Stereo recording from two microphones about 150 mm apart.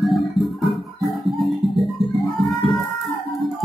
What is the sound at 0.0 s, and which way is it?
Music, centre (ahead or behind).